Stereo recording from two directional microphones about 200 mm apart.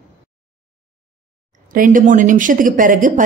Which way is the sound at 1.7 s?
40° right (ahead or behind).